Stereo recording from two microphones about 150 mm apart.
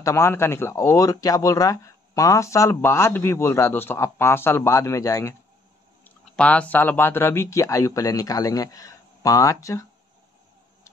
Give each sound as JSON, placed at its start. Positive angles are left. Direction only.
{"t": 0.0, "sound": "speech", "side_deg": 20}
{"t": 6.0, "sound": "speech", "side_deg": 10}